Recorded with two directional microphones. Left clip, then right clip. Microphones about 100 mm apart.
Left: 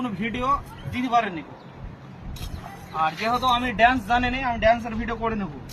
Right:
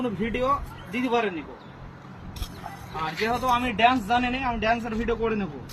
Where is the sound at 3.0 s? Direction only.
35° left (ahead or behind).